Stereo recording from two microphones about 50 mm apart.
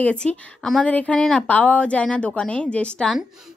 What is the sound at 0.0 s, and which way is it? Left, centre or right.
Speech, left.